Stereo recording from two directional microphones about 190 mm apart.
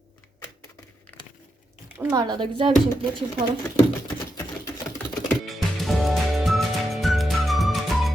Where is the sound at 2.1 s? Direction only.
25° right (ahead or behind).